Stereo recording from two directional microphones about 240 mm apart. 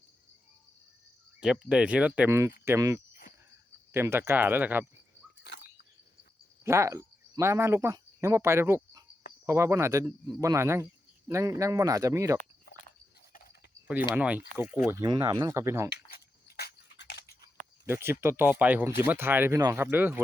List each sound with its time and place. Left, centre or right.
1.4 s speech: centre
5.4 s bird: left
6.7 s speech: centre
13.3 s cricket: left
14.2 s speech: centre
15.9 s dog: left
17.8 s speech: centre